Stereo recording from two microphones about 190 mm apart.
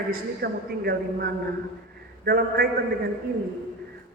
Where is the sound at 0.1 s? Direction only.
55° right (ahead or behind).